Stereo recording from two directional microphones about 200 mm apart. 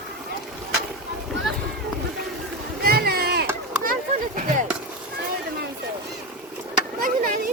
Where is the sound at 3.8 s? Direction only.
40° right (ahead or behind).